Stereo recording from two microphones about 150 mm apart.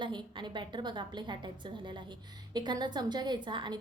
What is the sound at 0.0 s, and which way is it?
A woman's voice, 30° right (ahead or behind).